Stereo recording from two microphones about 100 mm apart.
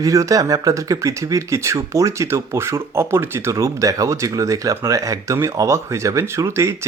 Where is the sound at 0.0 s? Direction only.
35° right (ahead or behind).